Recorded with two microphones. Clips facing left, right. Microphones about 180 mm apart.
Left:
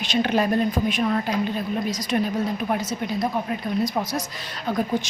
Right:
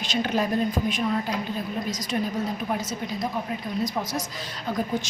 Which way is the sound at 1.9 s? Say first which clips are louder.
Left 4 dB; 65° left (ahead or behind).